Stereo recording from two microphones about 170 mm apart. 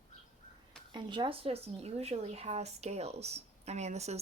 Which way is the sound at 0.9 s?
25° right (ahead or behind).